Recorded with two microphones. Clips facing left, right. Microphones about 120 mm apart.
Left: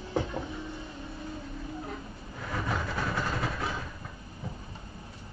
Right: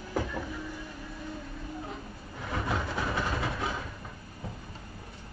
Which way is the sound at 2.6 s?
5° right (ahead or behind).